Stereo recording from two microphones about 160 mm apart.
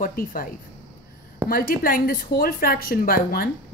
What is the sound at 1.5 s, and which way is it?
A woman's voice, 60° left (ahead or behind).